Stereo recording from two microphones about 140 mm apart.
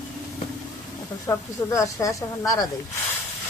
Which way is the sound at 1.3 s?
20° left (ahead or behind).